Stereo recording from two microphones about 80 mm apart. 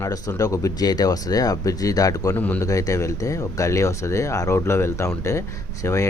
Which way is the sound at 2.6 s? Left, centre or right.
Left.